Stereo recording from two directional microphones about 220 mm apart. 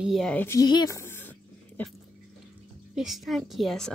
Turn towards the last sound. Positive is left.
turn(degrees=0)  # may be behind; listen again after turning